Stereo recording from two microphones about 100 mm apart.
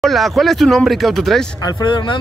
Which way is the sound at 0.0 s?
Centre (ahead or behind).